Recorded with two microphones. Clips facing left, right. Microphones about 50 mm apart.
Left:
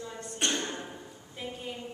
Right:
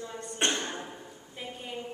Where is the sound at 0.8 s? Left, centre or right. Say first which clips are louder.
Even; centre.